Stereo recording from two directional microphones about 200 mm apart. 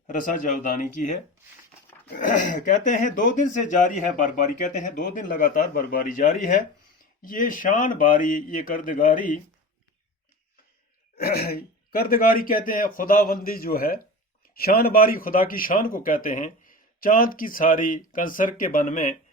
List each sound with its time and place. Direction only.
0.1 s speech: 40° left (ahead or behind)
2.1 s speech: 40° left (ahead or behind)
11.2 s speech: 50° left (ahead or behind)